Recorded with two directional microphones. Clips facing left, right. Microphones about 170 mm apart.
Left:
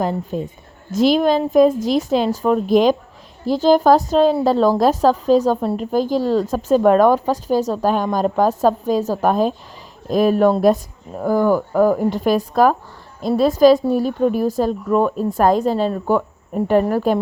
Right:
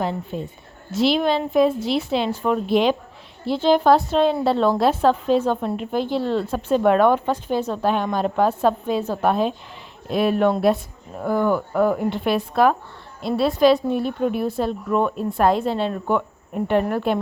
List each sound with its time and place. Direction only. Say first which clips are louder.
0.0 s a woman's voice: left 4 dB; 45° left (ahead or behind)